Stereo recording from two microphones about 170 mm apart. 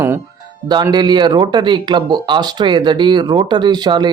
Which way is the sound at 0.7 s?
25° right (ahead or behind).